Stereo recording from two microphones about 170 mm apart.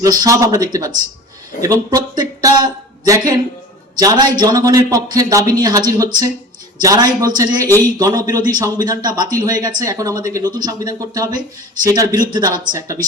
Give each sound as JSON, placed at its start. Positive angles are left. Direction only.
{"t": 0.0, "sound": "speech", "side_deg": -20}